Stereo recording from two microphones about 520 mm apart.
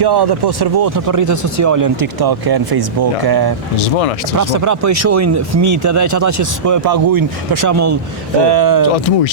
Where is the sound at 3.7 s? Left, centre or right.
Left.